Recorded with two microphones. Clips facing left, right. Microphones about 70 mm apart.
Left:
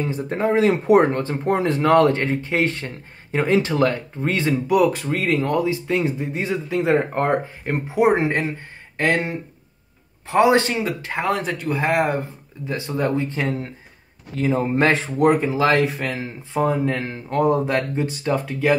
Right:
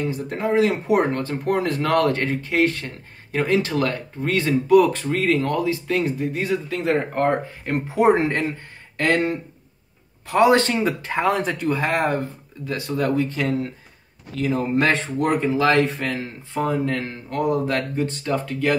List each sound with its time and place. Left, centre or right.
0.0 s speech: left
4.6 s speech: centre
10.7 s speech: centre
12.2 s speech: left
15.1 s speech: centre; by 17.6 s left
17.6 s speech: left